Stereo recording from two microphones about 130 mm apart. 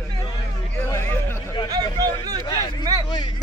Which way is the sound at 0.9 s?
20° left (ahead or behind).